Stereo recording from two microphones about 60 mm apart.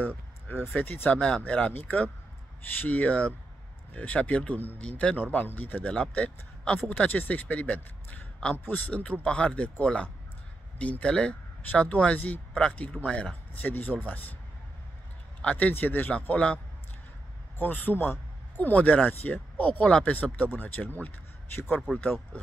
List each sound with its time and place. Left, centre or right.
1.1 s a man's voice: centre
1.5 s speech: left
8.5 s speech: left
9.2 s speech: centre
12.9 s a man's voice: centre
13.7 s speech: left
15.4 s speech: left
17.6 s speech: left